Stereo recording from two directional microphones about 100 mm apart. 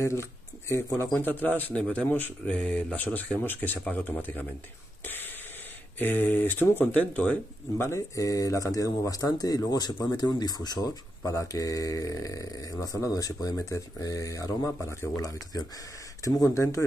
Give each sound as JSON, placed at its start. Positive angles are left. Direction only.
{"t": 0.0, "sound": "a man's voice", "side_deg": 25}
{"t": 5.0, "sound": "a sound", "side_deg": 20}
{"t": 5.9, "sound": "a man's voice", "side_deg": 20}
{"t": 7.8, "sound": "speech", "side_deg": 30}